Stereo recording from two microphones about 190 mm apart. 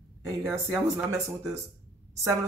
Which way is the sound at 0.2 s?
15° right (ahead or behind).